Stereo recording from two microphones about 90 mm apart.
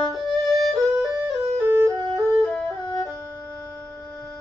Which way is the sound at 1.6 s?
35° right (ahead or behind).